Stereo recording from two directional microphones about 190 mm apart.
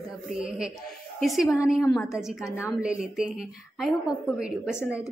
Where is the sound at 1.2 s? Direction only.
Centre (ahead or behind).